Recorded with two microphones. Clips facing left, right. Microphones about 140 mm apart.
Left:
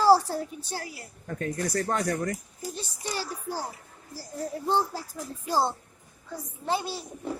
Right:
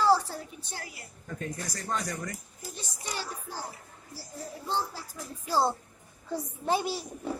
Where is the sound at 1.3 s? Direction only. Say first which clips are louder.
Left 7 dB; 60° left (ahead or behind).